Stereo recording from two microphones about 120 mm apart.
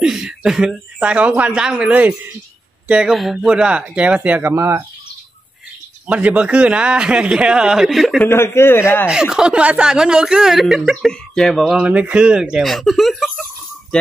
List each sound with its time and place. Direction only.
0.0 s a man's voice: 5° right (ahead or behind); by 4.8 s 20° right (ahead or behind)
6.0 s a man's voice: 10° right (ahead or behind)
8.2 s a man's voice: 20° left (ahead or behind)
9.1 s speech: 5° right (ahead or behind)
11.7 s speech: 10° right (ahead or behind)